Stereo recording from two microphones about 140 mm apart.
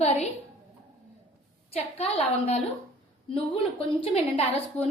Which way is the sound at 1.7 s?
45° left (ahead or behind).